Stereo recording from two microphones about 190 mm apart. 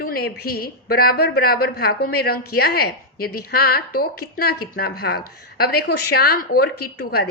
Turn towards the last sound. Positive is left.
turn(degrees=55)  # may be behind; listen again after turning